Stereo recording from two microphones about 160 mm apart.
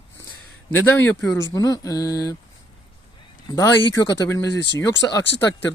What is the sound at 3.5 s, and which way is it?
Speech, 20° left (ahead or behind).